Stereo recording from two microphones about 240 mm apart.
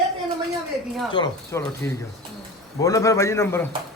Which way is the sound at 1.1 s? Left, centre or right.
Centre.